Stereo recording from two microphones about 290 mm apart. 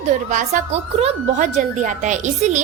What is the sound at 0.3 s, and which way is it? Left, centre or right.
A woman's voice, right.